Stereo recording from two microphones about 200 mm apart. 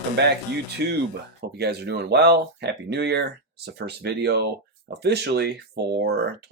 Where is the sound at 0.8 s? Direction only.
60° right (ahead or behind).